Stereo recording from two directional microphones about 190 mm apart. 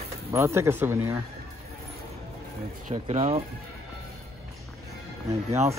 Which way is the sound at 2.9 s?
35° right (ahead or behind).